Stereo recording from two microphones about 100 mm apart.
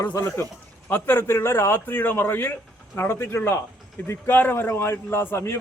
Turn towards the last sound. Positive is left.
turn(degrees=25)  # may be behind; listen again after turning